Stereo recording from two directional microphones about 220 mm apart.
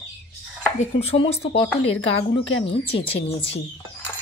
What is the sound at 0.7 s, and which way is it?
Speech, 30° left (ahead or behind).